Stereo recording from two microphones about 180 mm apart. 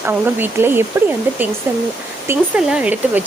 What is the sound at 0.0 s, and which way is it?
Speech, 10° right (ahead or behind).